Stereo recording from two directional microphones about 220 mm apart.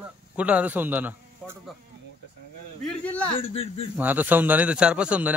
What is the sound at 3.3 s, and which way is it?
Speech, 25° left (ahead or behind).